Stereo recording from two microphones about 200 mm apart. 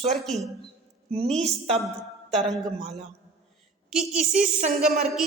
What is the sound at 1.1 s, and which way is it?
Speech, 30° right (ahead or behind).